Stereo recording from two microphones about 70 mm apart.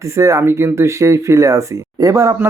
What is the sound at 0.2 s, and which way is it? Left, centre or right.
Speech, right.